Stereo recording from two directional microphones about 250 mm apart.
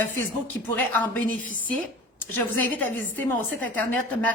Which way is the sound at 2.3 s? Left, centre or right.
Centre.